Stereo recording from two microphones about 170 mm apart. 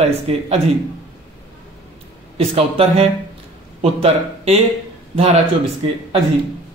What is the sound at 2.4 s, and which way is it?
Speech, 35° right (ahead or behind).